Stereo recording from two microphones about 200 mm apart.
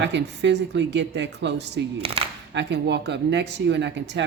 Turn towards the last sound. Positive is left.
turn(degrees=-60)  # may be behind; listen again after turning